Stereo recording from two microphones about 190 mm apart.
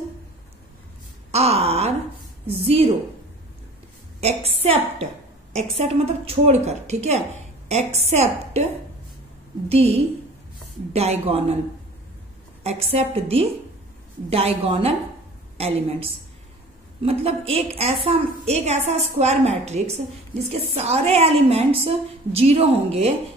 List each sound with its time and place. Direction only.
1.3 s a woman's voice: 35° right (ahead or behind)
4.2 s a woman's voice: 35° right (ahead or behind)
9.7 s a woman's voice: 30° right (ahead or behind)
12.6 s a woman's voice: 35° right (ahead or behind)